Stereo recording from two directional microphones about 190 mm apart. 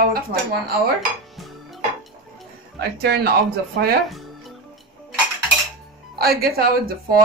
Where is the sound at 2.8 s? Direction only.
55° right (ahead or behind).